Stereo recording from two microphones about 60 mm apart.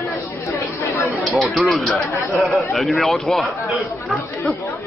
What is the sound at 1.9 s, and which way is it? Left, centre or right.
Speech, left.